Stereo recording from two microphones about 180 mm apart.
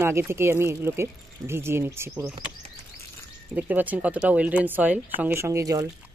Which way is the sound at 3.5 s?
10° right (ahead or behind).